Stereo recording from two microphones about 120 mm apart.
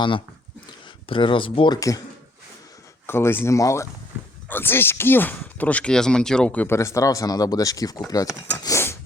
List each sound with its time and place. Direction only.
1.0 s speech: 45° left (ahead or behind)
1.7 s speech: 30° left (ahead or behind)
3.1 s speech: 20° left (ahead or behind)
6.7 s speech: 25° left (ahead or behind)